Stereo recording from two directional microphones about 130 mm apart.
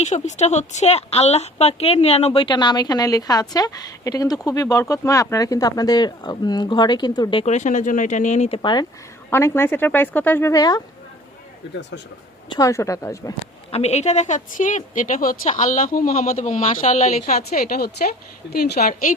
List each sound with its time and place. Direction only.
0.1 s a woman's voice: 65° left (ahead or behind); by 7.4 s 35° left (ahead or behind)
7.4 s speech: 65° left (ahead or behind); by 8.9 s 35° left (ahead or behind)
9.3 s speech: 20° left (ahead or behind)
12.5 s speech: 25° left (ahead or behind)
13.7 s a woman's voice: 55° left (ahead or behind); by 16.1 s 90° left
16.2 s speech: 75° left (ahead or behind)
17.6 s a woman's voice: 90° left
18.8 s a woman's voice: 90° left